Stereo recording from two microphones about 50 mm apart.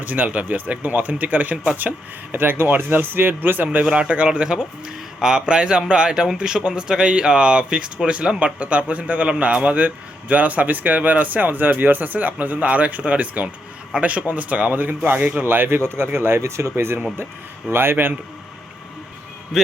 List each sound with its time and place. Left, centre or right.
0.0 s a man's voice: right
3.8 s a man's voice: right
19.5 s a man's voice: centre